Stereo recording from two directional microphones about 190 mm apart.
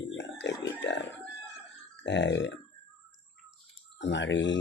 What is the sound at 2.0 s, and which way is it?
Speech, 70° left (ahead or behind).